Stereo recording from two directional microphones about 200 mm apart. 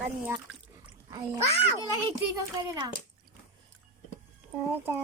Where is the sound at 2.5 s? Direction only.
15° right (ahead or behind).